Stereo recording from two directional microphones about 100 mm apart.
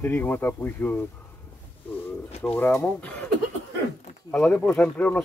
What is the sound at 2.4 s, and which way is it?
Speech, 20° left (ahead or behind).